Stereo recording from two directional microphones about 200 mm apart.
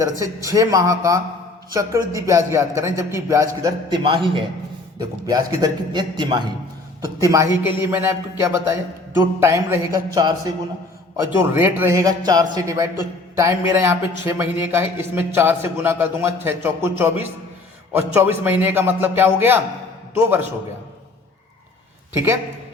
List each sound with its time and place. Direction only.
0.0 s a man's voice: 15° right (ahead or behind)
11.3 s speech: 10° right (ahead or behind)
22.1 s a man's voice: 10° right (ahead or behind)